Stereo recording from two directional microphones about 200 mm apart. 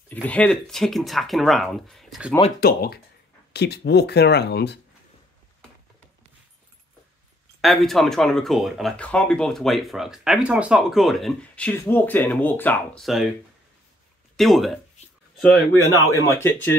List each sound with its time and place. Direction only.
0.1 s speech: 5° left (ahead or behind)
2.6 s speech: 50° left (ahead or behind)
7.6 s speech: centre (ahead or behind)
14.3 s speech: centre (ahead or behind)